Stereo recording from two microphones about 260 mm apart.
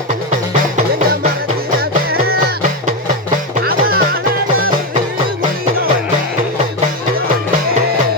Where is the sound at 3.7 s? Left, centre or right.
Right.